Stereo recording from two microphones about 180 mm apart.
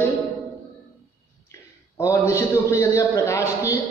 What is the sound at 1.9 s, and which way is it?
A man's voice, 15° left (ahead or behind).